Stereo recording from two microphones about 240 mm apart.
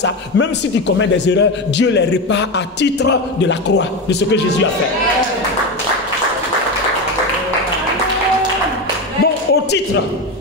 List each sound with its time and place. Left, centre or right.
0.0 s a man's voice: left
9.2 s basketball bounce: left